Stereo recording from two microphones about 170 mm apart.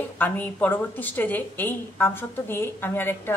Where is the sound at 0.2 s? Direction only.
10° left (ahead or behind).